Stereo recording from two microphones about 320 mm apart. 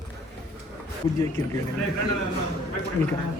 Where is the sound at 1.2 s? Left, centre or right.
Centre.